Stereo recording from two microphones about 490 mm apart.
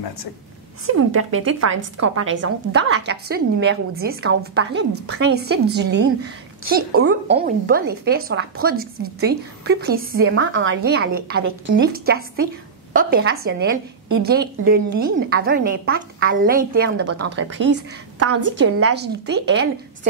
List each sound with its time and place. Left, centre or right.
0.8 s a woman's voice: right